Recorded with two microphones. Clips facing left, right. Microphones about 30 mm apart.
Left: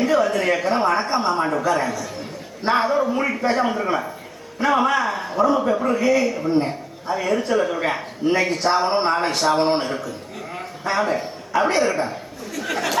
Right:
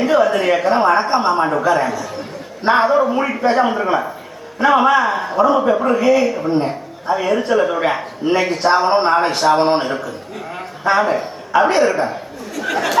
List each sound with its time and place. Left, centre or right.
0.0 s a man's voice: centre
8.4 s a man's voice: centre